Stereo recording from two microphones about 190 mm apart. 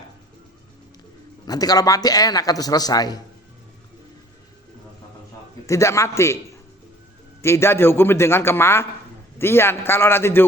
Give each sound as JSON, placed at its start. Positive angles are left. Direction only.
{"t": 1.5, "sound": "a man's voice", "side_deg": 20}
{"t": 5.6, "sound": "a man's voice", "side_deg": 15}
{"t": 7.4, "sound": "a man's voice", "side_deg": 15}